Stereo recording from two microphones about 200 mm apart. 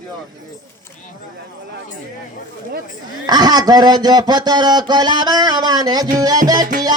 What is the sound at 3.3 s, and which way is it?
Speech, 20° right (ahead or behind).